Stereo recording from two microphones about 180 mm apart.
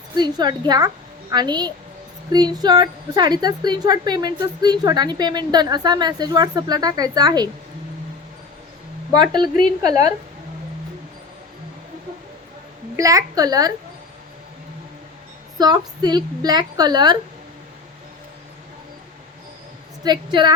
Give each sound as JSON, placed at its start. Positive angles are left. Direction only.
{"t": 0.2, "sound": "a woman's voice", "side_deg": -25}
{"t": 9.1, "sound": "a woman's voice", "side_deg": -25}
{"t": 13.0, "sound": "a woman's voice", "side_deg": -20}
{"t": 15.5, "sound": "a woman's voice", "side_deg": -20}
{"t": 20.1, "sound": "a woman's voice", "side_deg": -25}